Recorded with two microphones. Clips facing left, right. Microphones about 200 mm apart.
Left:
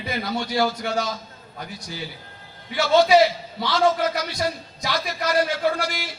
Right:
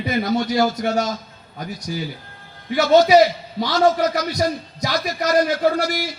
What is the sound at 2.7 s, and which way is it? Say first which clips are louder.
A man's voice: right 4 dB; 40° right (ahead or behind).